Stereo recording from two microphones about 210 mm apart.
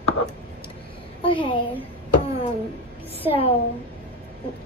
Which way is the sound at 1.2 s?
25° left (ahead or behind).